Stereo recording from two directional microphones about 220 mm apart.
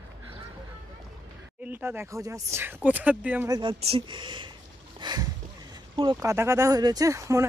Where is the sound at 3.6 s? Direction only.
25° right (ahead or behind).